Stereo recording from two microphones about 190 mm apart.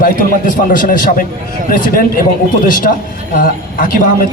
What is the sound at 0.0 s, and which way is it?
A man's voice, 45° left (ahead or behind).